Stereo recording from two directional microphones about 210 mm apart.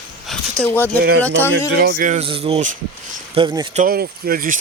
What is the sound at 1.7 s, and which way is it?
Speech, 40° right (ahead or behind).